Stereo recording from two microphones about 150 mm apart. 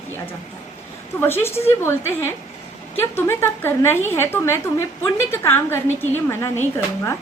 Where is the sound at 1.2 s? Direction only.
15° left (ahead or behind).